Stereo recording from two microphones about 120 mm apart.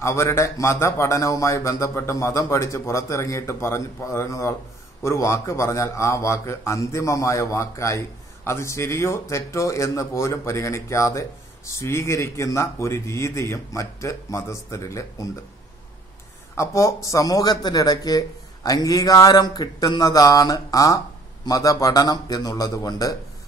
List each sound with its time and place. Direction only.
0.0 s speech: 25° left (ahead or behind)
16.5 s speech: 25° left (ahead or behind)